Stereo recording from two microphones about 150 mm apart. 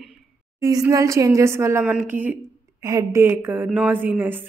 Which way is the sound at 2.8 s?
20° right (ahead or behind).